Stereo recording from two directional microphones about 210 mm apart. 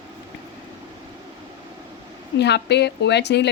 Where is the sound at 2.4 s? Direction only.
55° left (ahead or behind).